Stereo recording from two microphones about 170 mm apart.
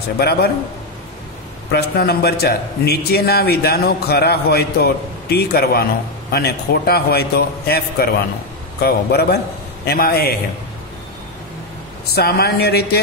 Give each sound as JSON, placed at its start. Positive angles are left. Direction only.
{"t": 0.2, "sound": "speech", "side_deg": 70}
{"t": 1.7, "sound": "a man's voice", "side_deg": 70}
{"t": 12.2, "sound": "speech", "side_deg": 70}